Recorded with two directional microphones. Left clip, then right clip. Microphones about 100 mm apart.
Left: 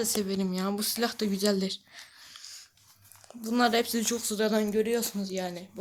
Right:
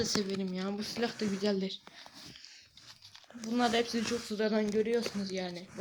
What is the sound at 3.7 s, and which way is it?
Speech, 10° left (ahead or behind).